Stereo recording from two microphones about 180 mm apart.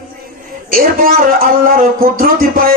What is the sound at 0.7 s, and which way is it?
Speech, 50° right (ahead or behind).